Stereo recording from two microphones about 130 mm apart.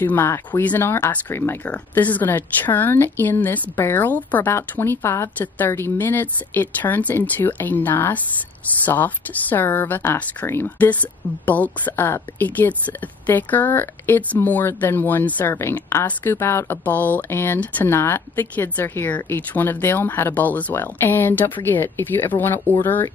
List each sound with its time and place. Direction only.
0.0 s speech: 15° left (ahead or behind)